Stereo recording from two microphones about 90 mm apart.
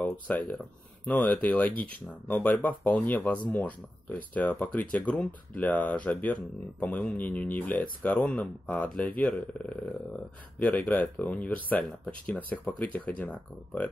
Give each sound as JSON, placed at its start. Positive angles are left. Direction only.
{"t": 0.3, "sound": "speech", "side_deg": 15}